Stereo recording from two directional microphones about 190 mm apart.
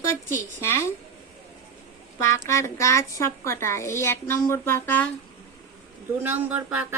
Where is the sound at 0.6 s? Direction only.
15° left (ahead or behind).